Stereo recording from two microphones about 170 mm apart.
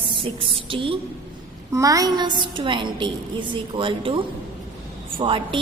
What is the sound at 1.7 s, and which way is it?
A woman's voice, 20° right (ahead or behind).